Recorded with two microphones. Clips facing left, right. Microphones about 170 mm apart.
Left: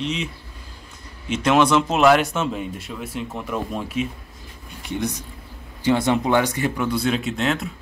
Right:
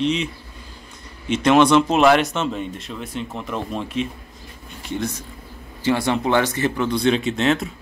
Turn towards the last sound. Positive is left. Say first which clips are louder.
# right 3 dB
turn(degrees=0)  # may be behind; listen again after turning